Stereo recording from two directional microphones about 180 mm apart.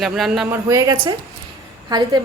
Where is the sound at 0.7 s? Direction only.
20° right (ahead or behind).